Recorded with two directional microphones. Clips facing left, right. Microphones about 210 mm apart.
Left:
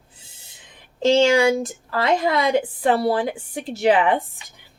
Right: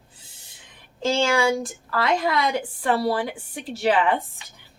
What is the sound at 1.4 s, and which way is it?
A woman's voice, 20° left (ahead or behind).